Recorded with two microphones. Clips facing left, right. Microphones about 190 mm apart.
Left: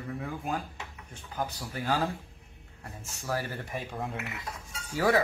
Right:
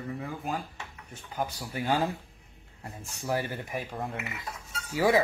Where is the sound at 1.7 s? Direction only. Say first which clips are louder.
Right 2 dB; 15° right (ahead or behind).